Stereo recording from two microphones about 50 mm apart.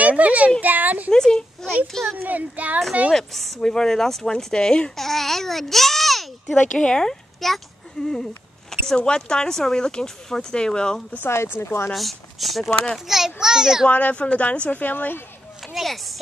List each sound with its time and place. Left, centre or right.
0.0 s a sound: right
0.6 s speech: right
1.1 s speech: centre
2.2 s speech: right
3.1 s a child's voice: centre
4.9 s a child's voice: centre
6.8 s a child's voice: centre
11.2 s speech: left
11.9 s a child's voice: centre
13.8 s speech: left
14.7 s speech: left
15.7 s speech: centre